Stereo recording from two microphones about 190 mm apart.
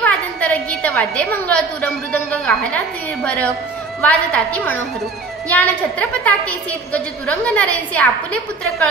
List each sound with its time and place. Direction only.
0.0 s a woman's voice: 5° left (ahead or behind)